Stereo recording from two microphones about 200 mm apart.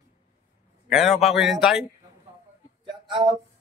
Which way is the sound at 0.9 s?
Centre (ahead or behind).